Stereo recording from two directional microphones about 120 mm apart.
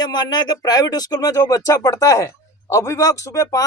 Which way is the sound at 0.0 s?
35° left (ahead or behind).